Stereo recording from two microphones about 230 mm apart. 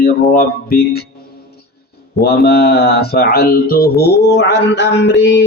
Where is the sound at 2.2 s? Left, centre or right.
Left.